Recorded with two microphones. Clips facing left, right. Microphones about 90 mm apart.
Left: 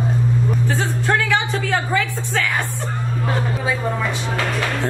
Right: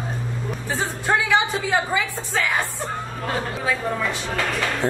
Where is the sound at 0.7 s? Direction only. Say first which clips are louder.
Right 3 dB; 10° right (ahead or behind).